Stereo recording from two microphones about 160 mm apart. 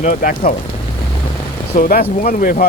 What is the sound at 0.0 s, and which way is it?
Speech, 55° left (ahead or behind).